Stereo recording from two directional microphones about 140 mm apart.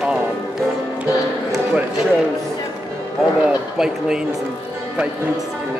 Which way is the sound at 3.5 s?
5° right (ahead or behind).